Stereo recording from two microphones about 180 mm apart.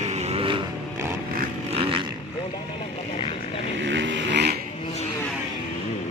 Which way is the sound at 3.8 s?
90° right.